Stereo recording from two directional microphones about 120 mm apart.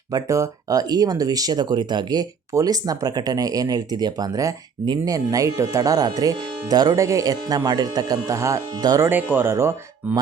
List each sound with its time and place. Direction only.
0.1 s speech: 25° right (ahead or behind)
9.0 s speech: 15° right (ahead or behind)